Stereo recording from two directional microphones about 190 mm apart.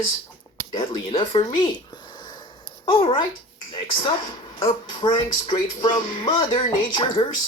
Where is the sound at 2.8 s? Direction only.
25° left (ahead or behind).